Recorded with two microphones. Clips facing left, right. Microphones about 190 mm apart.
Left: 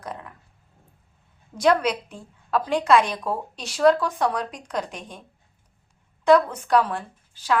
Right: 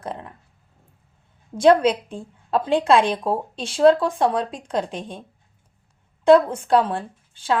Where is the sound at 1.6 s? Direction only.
30° right (ahead or behind).